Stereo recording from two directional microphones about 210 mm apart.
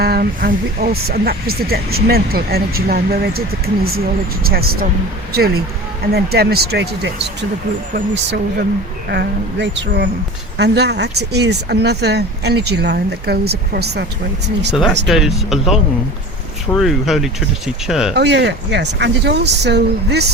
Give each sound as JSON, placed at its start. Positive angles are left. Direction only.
{"t": 0.0, "sound": "speech", "side_deg": -45}
{"t": 6.1, "sound": "speech", "side_deg": -50}
{"t": 9.0, "sound": "speech", "side_deg": -55}
{"t": 14.7, "sound": "speech", "side_deg": 0}
{"t": 18.1, "sound": "speech", "side_deg": -55}